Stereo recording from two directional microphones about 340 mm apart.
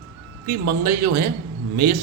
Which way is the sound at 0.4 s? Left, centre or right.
Right.